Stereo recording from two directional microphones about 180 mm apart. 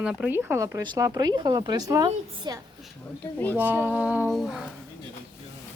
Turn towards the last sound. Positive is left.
turn(degrees=-5)  # may be behind; listen again after turning